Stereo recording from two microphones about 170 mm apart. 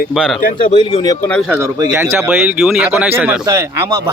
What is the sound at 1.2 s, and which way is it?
Speech, 5° left (ahead or behind).